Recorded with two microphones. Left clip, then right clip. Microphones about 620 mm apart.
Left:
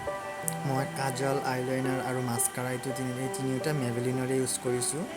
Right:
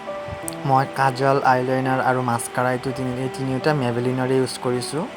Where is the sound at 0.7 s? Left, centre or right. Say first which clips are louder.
Right 14 dB; left.